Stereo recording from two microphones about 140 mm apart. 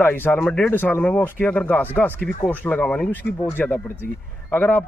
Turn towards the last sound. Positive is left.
turn(degrees=15)  # may be behind; listen again after turning